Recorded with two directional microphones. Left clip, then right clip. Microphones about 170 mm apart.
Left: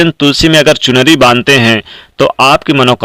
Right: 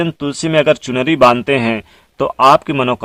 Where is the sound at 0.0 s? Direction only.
25° left (ahead or behind).